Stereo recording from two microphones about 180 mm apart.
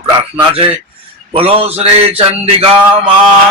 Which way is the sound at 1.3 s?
30° right (ahead or behind).